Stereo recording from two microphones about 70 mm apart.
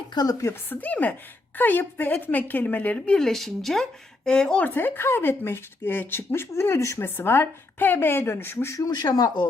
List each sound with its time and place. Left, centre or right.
0.1 s speech: left
0.7 s a woman's voice: left
3.2 s speech: centre
4.6 s speech: left
8.9 s speech: left